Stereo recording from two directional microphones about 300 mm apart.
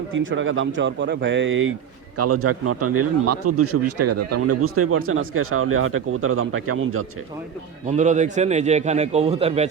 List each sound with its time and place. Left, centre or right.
0.1 s speech: right
7.9 s a man's voice: right